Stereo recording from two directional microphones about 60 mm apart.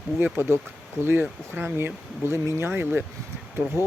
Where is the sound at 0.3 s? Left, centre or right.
Right.